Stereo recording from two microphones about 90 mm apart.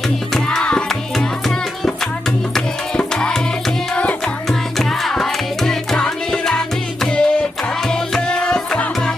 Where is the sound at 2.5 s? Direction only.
10° left (ahead or behind).